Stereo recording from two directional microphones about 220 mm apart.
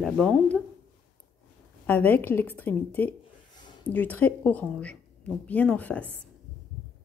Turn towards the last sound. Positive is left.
turn(degrees=5)  # may be behind; listen again after turning